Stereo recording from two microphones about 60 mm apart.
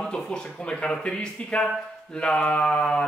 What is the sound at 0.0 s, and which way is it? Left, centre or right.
Speech, centre.